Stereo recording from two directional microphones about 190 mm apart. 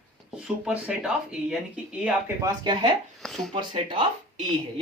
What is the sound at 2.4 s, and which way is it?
Speech, 20° right (ahead or behind).